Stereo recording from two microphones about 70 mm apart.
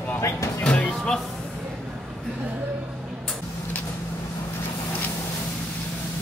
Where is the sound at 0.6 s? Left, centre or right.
Centre.